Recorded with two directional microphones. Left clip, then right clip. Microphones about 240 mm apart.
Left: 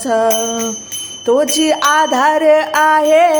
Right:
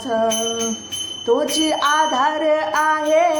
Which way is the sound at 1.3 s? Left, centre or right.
Left.